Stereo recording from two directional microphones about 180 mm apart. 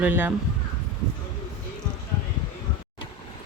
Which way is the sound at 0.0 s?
10° right (ahead or behind).